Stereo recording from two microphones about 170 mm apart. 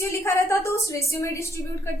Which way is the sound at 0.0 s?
15° left (ahead or behind).